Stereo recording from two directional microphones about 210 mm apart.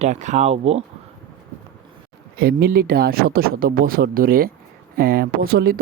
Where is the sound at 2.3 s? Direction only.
45° right (ahead or behind).